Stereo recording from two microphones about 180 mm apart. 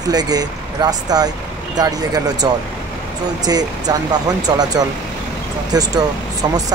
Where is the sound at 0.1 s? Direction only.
20° right (ahead or behind).